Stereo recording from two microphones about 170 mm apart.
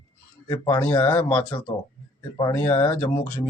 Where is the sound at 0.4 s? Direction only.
15° left (ahead or behind).